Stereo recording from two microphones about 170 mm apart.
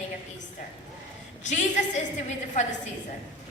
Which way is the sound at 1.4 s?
45° left (ahead or behind).